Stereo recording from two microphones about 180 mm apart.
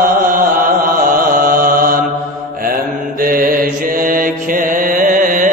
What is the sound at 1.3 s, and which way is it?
Chant, 50° right (ahead or behind).